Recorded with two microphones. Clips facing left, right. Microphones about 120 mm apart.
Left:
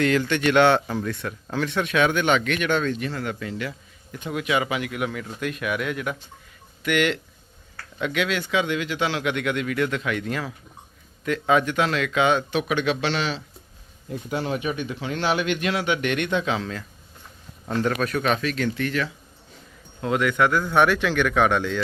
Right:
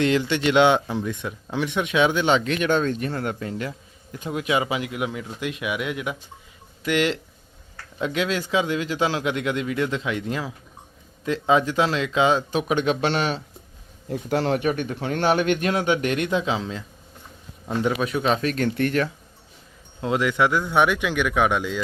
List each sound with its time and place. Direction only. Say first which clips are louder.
0.0 s a man's voice: even; 25° right (ahead or behind); by 3.7 s 40° right (ahead or behind)
4.3 s speech: right 1 dB; 25° right (ahead or behind)
6.8 s a man's voice: even; 30° right (ahead or behind)
12.5 s a man's voice: right 1 dB; 40° right (ahead or behind)
14.3 s a man's voice: right 5 dB; 70° right (ahead or behind); by 16.8 s 25° right (ahead or behind)
17.8 s speech: right 1 dB; 15° right (ahead or behind)
18.3 s speech: right 3 dB; 45° right (ahead or behind)
20.0 s a man's voice: even; 25° right (ahead or behind)